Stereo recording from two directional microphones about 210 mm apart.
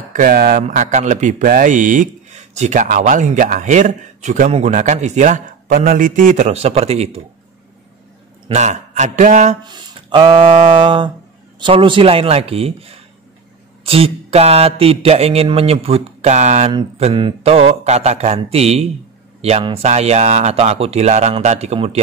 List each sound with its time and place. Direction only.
0.1 s a man's voice: 40° right (ahead or behind)
8.5 s a man's voice: 35° right (ahead or behind)
9.7 s speech: 20° right (ahead or behind)
11.6 s mantra: 25° right (ahead or behind)
19.4 s a man's voice: 30° right (ahead or behind)